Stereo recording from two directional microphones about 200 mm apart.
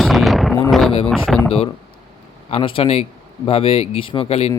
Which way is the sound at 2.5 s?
25° left (ahead or behind).